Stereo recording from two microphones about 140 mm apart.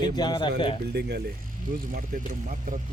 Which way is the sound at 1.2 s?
90° right.